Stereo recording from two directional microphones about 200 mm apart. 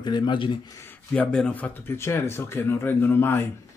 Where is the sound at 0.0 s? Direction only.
20° left (ahead or behind).